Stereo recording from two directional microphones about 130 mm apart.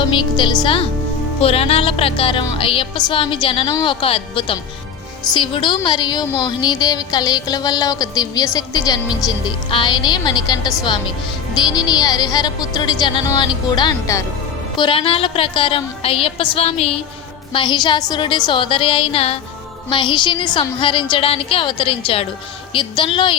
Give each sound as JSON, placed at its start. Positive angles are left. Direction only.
{"t": 0.0, "sound": "music", "side_deg": 40}
{"t": 3.7, "sound": "a woman's voice", "side_deg": 30}
{"t": 4.0, "sound": "music", "side_deg": 45}
{"t": 17.5, "sound": "music", "side_deg": 40}